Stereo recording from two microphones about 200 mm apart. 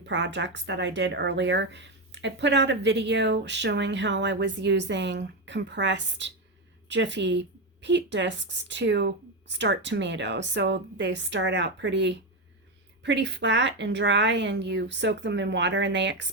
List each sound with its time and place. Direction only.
0.0 s speech: 60° right (ahead or behind)